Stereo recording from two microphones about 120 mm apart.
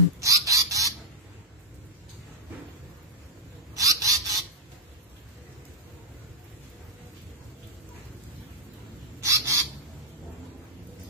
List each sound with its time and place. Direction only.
0.2 s bird: 30° right (ahead or behind)
3.7 s a sound: 30° right (ahead or behind)
9.2 s bird: 25° right (ahead or behind)